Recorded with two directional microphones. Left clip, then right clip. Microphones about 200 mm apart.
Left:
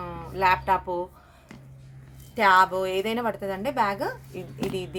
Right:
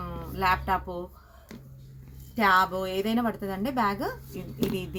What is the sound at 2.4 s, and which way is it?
A woman's voice, 50° left (ahead or behind).